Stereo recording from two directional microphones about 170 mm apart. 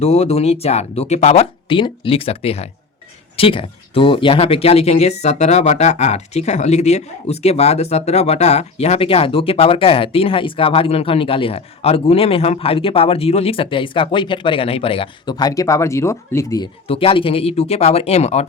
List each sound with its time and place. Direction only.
0.0 s speech: 35° left (ahead or behind); by 16.6 s 20° left (ahead or behind)
16.8 s speech: 35° left (ahead or behind)